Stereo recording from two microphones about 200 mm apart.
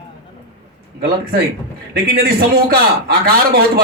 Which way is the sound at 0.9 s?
50° right (ahead or behind).